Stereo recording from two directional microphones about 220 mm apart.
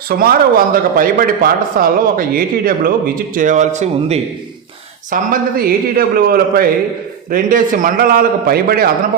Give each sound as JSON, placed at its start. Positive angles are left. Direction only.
{"t": 0.1, "sound": "speech", "side_deg": -40}